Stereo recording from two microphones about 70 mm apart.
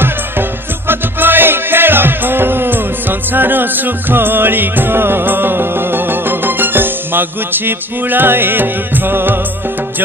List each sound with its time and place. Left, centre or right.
0.0 s music: right